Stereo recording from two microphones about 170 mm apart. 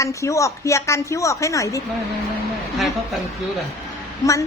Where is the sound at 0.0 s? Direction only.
20° left (ahead or behind).